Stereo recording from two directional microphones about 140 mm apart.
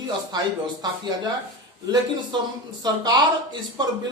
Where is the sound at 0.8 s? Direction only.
30° right (ahead or behind).